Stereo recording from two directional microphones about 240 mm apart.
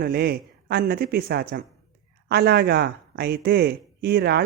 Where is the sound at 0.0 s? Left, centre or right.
Right.